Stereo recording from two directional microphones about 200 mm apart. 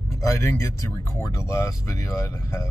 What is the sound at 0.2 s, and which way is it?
Speech, 15° left (ahead or behind).